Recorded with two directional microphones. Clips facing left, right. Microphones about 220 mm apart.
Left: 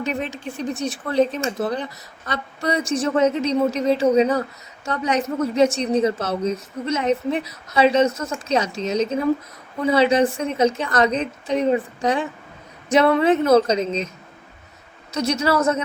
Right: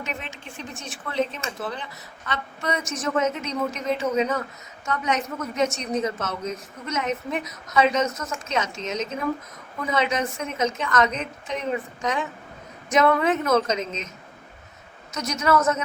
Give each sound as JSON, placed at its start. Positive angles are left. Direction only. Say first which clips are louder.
{"t": 0.0, "sound": "a woman's voice", "louder": "left 9 dB", "side_deg": 35}
{"t": 15.1, "sound": "a woman's voice", "louder": "left 3 dB", "side_deg": 30}